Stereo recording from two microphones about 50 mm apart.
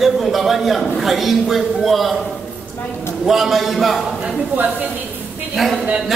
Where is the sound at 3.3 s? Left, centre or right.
Centre.